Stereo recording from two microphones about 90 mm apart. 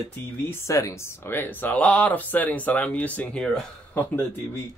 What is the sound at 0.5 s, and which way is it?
Speech, 35° left (ahead or behind).